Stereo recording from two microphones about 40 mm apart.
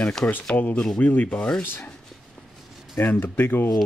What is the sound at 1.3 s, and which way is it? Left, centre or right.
Rub, left.